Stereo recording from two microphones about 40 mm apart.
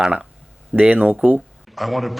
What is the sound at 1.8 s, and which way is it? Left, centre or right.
Speech, centre.